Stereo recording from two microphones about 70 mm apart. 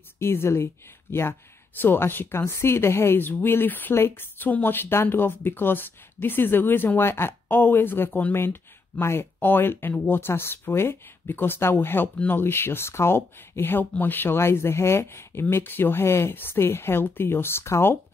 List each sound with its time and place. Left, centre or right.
0.2 s speech: left